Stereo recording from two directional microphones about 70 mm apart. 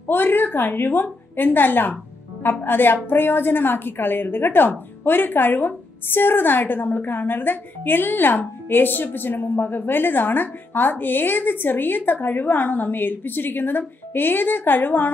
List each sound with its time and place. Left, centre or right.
0.1 s a woman's voice: left